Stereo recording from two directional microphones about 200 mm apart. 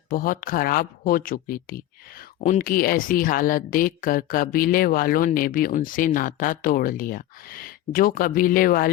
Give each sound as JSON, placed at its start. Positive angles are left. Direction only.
{"t": 0.1, "sound": "speech", "side_deg": 45}